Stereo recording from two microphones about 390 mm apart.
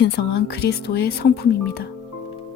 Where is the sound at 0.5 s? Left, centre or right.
Left.